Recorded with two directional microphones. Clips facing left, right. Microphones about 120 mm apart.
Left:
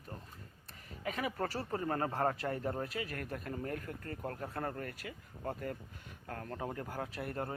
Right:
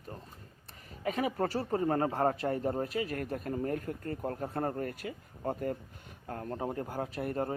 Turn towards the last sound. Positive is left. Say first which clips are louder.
# right 6 dB
turn(degrees=-30)  # may be behind; listen again after turning